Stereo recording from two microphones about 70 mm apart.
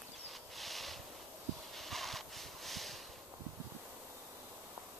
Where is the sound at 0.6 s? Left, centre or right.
Centre.